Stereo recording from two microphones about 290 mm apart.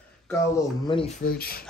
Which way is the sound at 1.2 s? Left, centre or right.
Left.